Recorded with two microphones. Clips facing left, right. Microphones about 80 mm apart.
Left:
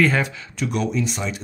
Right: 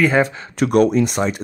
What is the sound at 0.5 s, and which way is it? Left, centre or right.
Speech, right.